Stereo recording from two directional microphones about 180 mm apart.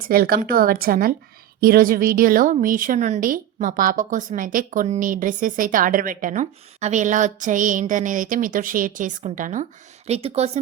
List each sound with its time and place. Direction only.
0.1 s a woman's voice: 55° right (ahead or behind); by 10.6 s 35° right (ahead or behind)